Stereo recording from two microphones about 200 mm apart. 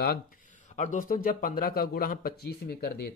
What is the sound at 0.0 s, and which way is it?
Speech, 45° left (ahead or behind).